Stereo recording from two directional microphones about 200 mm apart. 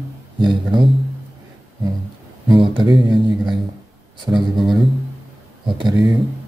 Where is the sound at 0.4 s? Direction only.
20° right (ahead or behind).